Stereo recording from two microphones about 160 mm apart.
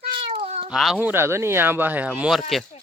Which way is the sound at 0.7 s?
5° right (ahead or behind).